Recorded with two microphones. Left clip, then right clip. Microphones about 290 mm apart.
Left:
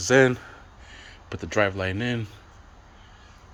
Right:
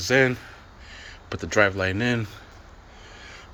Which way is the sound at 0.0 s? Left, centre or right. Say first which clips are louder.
Left 2 dB; centre.